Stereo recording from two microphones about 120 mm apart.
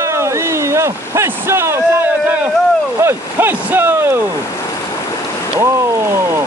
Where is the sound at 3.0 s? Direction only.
20° right (ahead or behind).